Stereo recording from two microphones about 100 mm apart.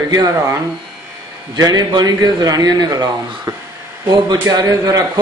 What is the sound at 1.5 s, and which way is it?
A man's voice, 40° right (ahead or behind).